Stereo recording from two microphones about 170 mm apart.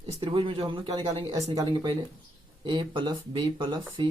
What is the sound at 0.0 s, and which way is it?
Speech, 30° right (ahead or behind).